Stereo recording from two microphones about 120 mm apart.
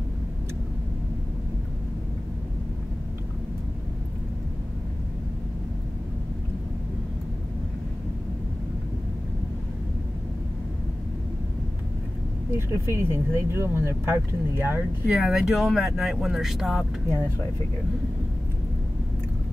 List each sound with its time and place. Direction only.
12.4 s speech: 20° right (ahead or behind)
15.0 s speech: 5° right (ahead or behind)